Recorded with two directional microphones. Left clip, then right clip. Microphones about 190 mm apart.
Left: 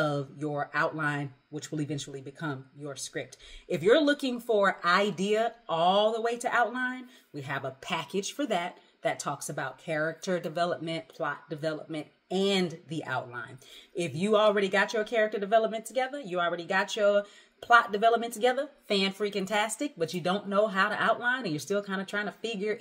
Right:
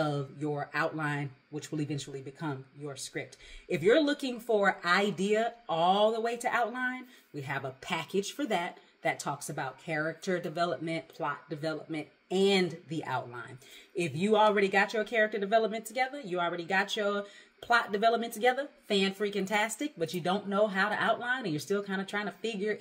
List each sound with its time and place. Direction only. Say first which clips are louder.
0.0 s speech: left 2 dB; 15° left (ahead or behind)